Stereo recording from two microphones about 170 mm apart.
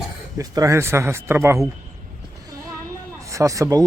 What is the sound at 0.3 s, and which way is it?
Speech, 20° right (ahead or behind).